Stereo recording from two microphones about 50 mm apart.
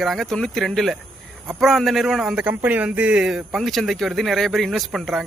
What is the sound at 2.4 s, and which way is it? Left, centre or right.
Speech, right.